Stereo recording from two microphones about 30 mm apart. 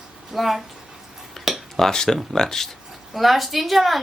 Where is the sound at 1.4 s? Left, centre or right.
Centre.